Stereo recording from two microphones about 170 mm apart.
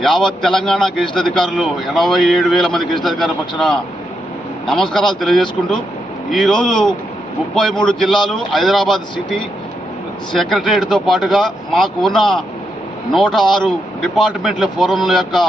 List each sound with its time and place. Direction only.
0.0 s a man's voice: 5° left (ahead or behind)
10.5 s a man's voice: centre (ahead or behind)